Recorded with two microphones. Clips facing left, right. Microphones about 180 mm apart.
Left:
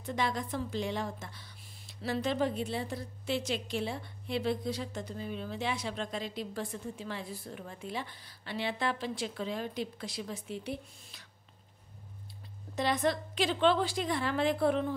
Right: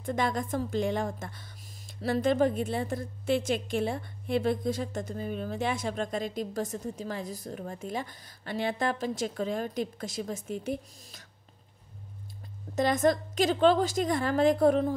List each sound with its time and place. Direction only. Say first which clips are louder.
0.0 s speech: right 4 dB; 50° right (ahead or behind)
12.7 s speech: right 5 dB; 45° right (ahead or behind)